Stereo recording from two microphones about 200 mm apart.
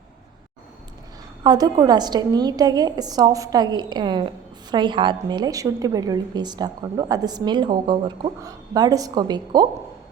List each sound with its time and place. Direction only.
1.5 s a woman's voice: 20° right (ahead or behind)